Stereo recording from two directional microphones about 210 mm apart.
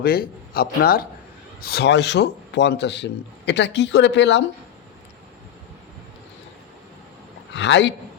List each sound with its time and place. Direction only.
0.0 s a man's voice: 45° left (ahead or behind)
7.5 s a man's voice: 60° left (ahead or behind)